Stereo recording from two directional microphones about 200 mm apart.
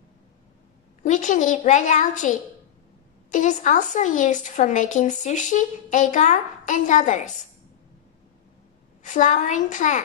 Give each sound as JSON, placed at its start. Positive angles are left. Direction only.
{"t": 1.0, "sound": "a woman's voice", "side_deg": 40}
{"t": 9.0, "sound": "a woman's voice", "side_deg": 40}